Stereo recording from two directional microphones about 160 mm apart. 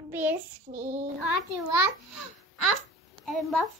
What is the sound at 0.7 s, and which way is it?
Child singing, 50° right (ahead or behind).